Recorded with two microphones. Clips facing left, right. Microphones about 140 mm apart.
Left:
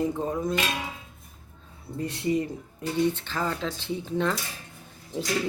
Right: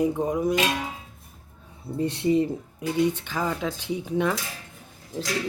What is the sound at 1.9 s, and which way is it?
Speech, 30° right (ahead or behind).